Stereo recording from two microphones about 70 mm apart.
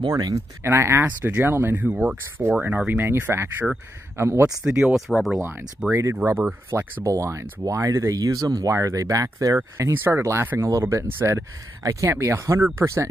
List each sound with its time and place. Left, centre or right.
0.0 s speech: right
0.7 s speech: right
3.3 s speech: right
4.6 s speech: centre
5.0 s speech: centre
5.8 s speech: centre
6.2 s speech: right
7.1 s speech: right
8.7 s speech: right
9.6 s speech: right
10.8 s speech: right
11.1 s speech: right
11.3 s speech: right